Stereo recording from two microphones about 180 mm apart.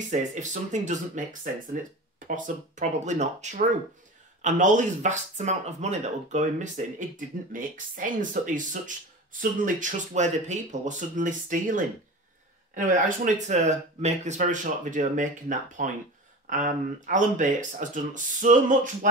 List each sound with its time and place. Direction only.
0.1 s speech: 40° right (ahead or behind)